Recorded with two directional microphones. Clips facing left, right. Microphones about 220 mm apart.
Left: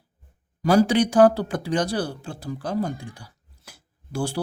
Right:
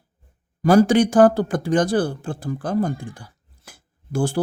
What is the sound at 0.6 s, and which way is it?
Speech, 50° right (ahead or behind).